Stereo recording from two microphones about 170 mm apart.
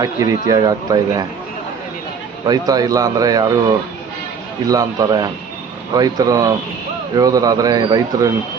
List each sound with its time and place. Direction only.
0.0 s a man's voice: 20° right (ahead or behind)
2.5 s a man's voice: 20° right (ahead or behind)